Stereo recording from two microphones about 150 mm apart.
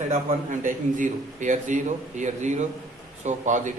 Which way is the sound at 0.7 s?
60° right (ahead or behind).